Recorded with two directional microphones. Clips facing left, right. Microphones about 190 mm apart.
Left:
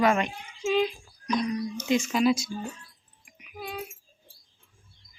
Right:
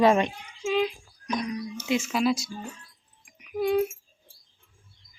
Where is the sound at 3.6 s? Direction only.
60° right (ahead or behind).